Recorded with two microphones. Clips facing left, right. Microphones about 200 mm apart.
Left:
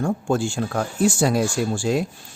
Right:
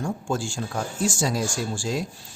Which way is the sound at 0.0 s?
60° left (ahead or behind).